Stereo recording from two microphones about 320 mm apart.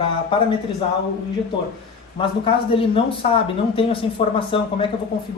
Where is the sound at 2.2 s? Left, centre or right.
Centre.